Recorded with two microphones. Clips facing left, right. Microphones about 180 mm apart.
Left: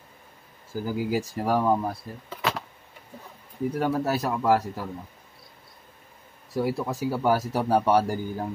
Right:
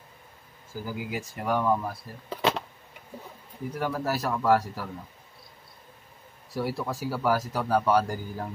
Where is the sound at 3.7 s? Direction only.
25° left (ahead or behind).